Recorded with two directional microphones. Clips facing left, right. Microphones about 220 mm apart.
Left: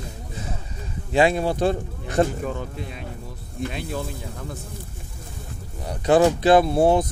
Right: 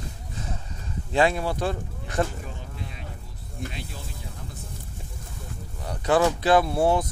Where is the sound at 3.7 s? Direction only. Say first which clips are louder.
Left 10 dB; 60° left (ahead or behind).